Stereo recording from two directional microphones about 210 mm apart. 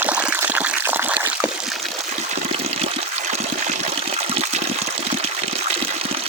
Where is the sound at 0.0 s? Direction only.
5° right (ahead or behind).